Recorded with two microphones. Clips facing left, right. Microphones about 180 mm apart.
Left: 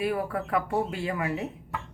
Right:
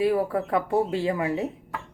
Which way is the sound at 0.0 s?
25° right (ahead or behind).